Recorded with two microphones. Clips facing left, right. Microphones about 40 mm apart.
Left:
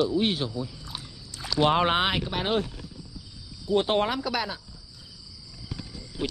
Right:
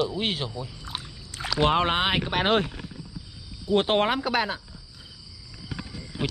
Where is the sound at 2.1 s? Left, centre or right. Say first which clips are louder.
Right 4 dB; right.